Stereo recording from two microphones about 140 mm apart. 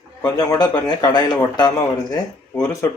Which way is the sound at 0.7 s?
30° left (ahead or behind).